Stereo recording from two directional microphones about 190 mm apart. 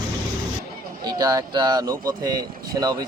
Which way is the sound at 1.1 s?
20° right (ahead or behind).